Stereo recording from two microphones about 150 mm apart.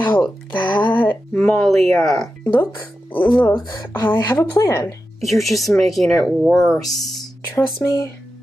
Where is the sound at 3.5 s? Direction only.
25° left (ahead or behind).